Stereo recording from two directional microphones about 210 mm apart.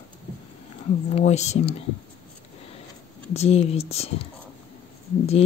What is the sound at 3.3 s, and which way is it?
Speech, 30° left (ahead or behind).